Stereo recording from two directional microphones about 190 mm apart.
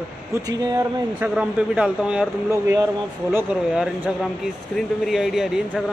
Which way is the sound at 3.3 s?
5° right (ahead or behind).